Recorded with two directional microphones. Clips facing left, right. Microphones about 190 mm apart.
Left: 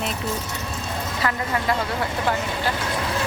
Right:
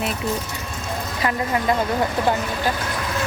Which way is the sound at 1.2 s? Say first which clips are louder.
Right 3 dB; 20° right (ahead or behind).